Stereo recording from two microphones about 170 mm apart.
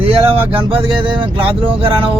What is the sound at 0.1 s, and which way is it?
Speech, 35° right (ahead or behind).